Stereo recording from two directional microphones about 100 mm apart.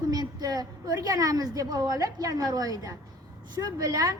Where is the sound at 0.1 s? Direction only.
40° right (ahead or behind).